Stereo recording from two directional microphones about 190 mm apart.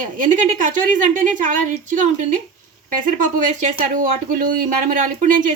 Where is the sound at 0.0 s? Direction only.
45° right (ahead or behind).